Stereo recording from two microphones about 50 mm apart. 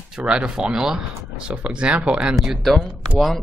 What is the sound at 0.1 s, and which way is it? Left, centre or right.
Speech, centre.